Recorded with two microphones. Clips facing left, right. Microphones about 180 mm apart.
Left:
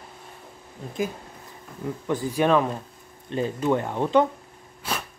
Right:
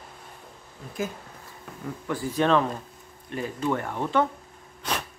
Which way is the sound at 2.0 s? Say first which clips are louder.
Left 2 dB; 15° left (ahead or behind).